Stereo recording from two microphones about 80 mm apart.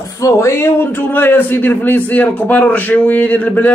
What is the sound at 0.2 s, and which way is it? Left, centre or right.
A man's voice, left.